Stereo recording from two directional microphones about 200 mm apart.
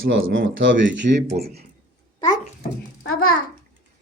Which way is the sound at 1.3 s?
50° right (ahead or behind).